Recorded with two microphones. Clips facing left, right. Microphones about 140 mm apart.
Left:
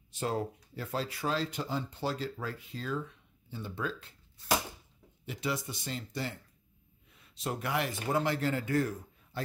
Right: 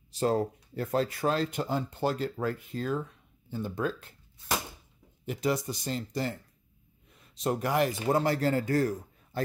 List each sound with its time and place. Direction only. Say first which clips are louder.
0.1 s speech: right 6 dB; 40° right (ahead or behind)
5.2 s a man's voice: right 6 dB; 45° right (ahead or behind)
7.4 s a man's voice: right 6 dB; 40° right (ahead or behind)